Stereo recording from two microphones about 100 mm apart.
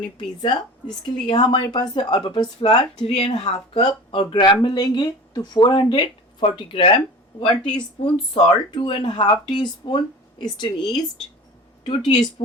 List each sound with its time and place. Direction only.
0.0 s speech: 50° left (ahead or behind)
3.2 s speech: 90° left; by 4.4 s 65° left (ahead or behind)
4.4 s speech: 45° left (ahead or behind)
11.8 s speech: 55° left (ahead or behind)